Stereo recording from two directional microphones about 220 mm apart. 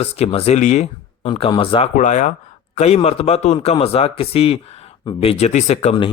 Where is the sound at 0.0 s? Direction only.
25° left (ahead or behind).